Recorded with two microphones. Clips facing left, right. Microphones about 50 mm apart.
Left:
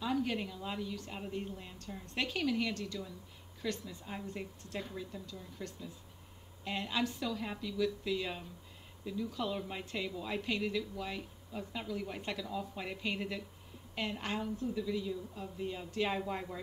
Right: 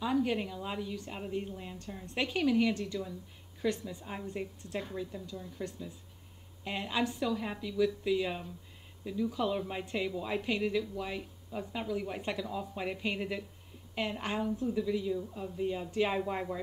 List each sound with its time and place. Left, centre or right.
0.0 s a woman's voice: centre
4.0 s speech: centre